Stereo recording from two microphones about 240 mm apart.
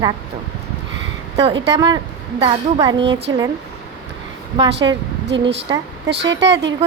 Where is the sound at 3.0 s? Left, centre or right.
Right.